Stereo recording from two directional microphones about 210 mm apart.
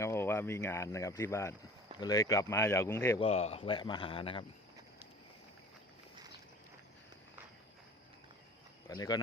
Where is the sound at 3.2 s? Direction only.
30° left (ahead or behind).